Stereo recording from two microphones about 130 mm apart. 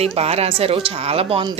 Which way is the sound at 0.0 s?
50° right (ahead or behind).